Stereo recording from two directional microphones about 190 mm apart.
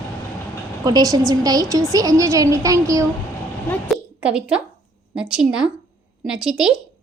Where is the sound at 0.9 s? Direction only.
20° right (ahead or behind).